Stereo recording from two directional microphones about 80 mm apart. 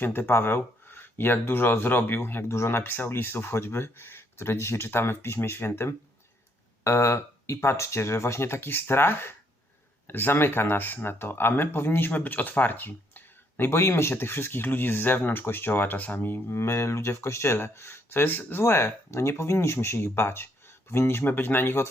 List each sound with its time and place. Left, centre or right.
0.0 s speech: left